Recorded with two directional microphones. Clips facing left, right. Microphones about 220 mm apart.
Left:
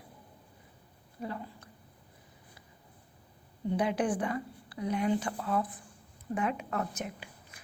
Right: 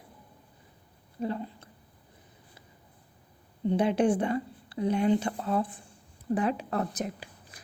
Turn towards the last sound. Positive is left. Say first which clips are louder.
# right 2 dB
turn(degrees=-35)  # may be behind; listen again after turning